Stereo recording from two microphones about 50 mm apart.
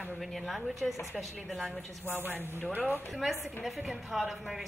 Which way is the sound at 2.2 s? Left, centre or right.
Right.